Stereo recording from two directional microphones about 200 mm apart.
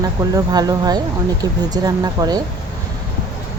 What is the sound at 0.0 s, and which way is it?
Speech, 20° right (ahead or behind).